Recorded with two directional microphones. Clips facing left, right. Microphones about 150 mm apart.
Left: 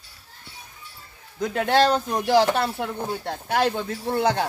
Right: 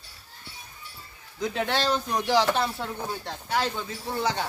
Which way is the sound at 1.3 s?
55° left (ahead or behind).